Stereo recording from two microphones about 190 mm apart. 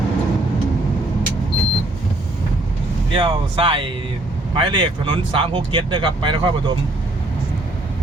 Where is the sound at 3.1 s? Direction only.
25° right (ahead or behind).